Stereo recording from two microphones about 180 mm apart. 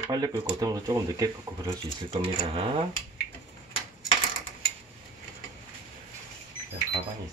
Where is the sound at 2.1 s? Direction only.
30° right (ahead or behind).